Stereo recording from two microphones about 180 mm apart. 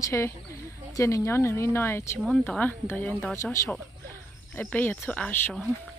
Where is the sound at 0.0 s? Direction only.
15° left (ahead or behind).